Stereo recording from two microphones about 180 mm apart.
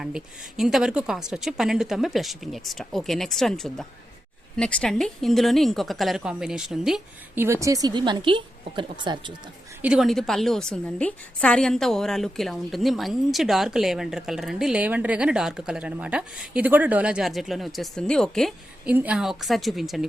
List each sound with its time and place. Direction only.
0.0 s a woman's voice: centre (ahead or behind)
7.4 s a woman's voice: 15° right (ahead or behind)
9.8 s a woman's voice: 5° right (ahead or behind)
18.9 s a woman's voice: 5° right (ahead or behind)